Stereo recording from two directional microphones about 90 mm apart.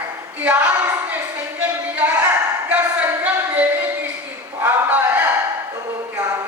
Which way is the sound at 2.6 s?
15° right (ahead or behind).